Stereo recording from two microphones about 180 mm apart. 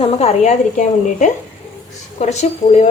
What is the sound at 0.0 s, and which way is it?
A woman's voice, 35° left (ahead or behind).